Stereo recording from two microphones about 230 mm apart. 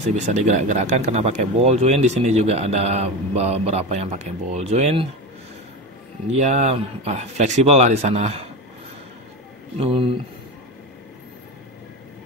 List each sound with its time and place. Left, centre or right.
0.1 s speech: right
6.3 s speech: right
9.8 s speech: right